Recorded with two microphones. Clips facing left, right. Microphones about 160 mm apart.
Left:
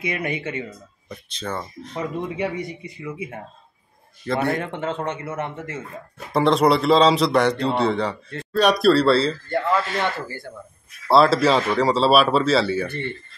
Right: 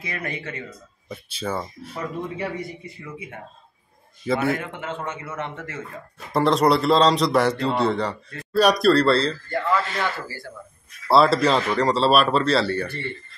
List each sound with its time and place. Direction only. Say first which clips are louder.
0.0 s speech: left 5 dB; 20° left (ahead or behind)
1.0 s speech: right 2 dB; 5° right (ahead or behind)
2.3 s speech: left 3 dB; 15° left (ahead or behind)
4.3 s a man's voice: even; centre (ahead or behind)
4.6 s speech: left 5 dB; 30° left (ahead or behind)
5.6 s speech: left 2 dB; 20° left (ahead or behind)
6.3 s a man's voice: left 1 dB; centre (ahead or behind)
9.5 s speech: left 2 dB; 25° left (ahead or behind)
11.1 s a man's voice: left 1 dB; centre (ahead or behind)